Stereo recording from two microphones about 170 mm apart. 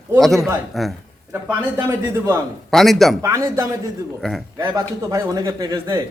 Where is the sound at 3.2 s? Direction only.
20° right (ahead or behind).